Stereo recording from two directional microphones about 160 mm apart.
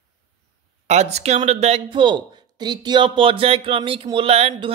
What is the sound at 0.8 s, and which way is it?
Speech, 45° right (ahead or behind).